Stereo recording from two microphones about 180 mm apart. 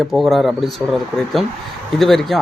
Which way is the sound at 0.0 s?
Centre (ahead or behind).